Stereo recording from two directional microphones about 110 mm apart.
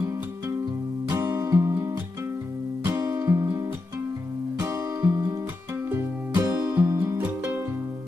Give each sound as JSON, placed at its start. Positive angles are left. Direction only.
{"t": 1.1, "sound": "music", "side_deg": -25}